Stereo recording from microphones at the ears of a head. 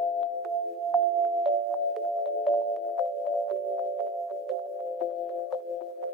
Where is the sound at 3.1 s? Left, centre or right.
Right.